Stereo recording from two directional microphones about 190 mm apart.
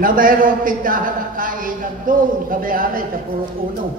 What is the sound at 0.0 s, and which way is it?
A man's voice, 45° right (ahead or behind).